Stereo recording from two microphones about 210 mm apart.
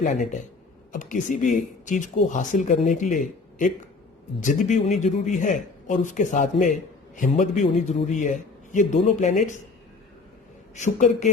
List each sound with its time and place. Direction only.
0.9 s speech: 35° left (ahead or behind)
10.8 s speech: 35° left (ahead or behind)